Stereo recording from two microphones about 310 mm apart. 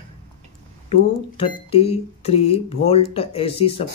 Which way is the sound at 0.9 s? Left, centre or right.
Centre.